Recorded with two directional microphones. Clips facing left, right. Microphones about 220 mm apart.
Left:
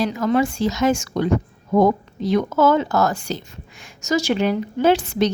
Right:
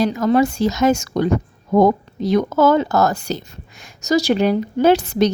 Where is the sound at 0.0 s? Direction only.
40° right (ahead or behind).